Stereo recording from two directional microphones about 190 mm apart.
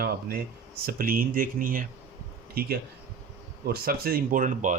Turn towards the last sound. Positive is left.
turn(degrees=-45)  # may be behind; listen again after turning